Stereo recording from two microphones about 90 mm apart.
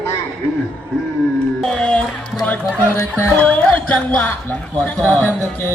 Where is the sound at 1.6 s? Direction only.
10° left (ahead or behind).